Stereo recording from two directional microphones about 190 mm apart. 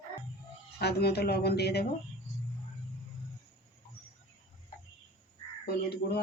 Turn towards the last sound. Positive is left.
turn(degrees=55)  # may be behind; listen again after turning